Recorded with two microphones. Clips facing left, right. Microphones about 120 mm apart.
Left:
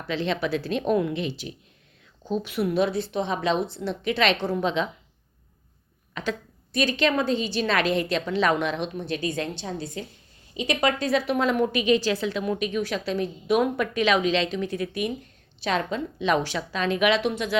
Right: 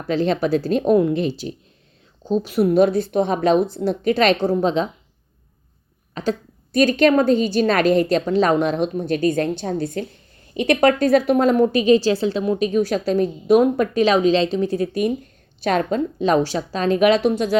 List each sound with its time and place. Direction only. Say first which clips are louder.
0.0 s a woman's voice: right 7 dB; 40° right (ahead or behind)
6.2 s a woman's voice: right 7 dB; 35° right (ahead or behind)
6.7 s a woman's voice: right 8 dB; 50° right (ahead or behind)